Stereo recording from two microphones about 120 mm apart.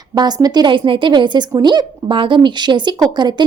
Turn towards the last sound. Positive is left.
turn(degrees=-35)  # may be behind; listen again after turning